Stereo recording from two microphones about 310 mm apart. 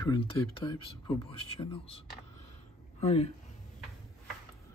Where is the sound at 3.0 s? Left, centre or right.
Centre.